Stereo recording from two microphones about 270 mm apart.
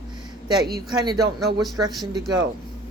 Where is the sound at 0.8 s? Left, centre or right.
Centre.